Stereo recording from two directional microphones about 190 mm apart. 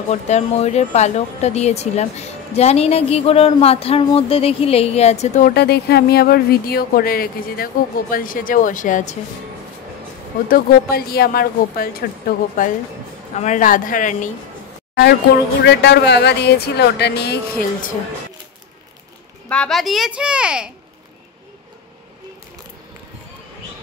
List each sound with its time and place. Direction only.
0.1 s speech: 35° left (ahead or behind)
5.5 s speech: 60° left (ahead or behind); by 9.1 s 40° left (ahead or behind)
10.5 s speech: 55° left (ahead or behind)
15.6 s speech: 65° left (ahead or behind)
19.5 s a child's voice: 5° left (ahead or behind)